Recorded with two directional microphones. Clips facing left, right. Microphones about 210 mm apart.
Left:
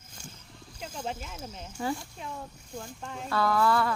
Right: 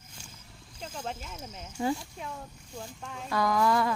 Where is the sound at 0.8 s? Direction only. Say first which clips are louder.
Left 2 dB; centre (ahead or behind).